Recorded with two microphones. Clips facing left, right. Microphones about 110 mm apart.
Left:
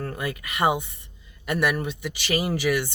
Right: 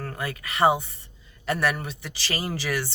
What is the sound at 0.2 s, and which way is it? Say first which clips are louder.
Speech: right 3 dB; 30° right (ahead or behind).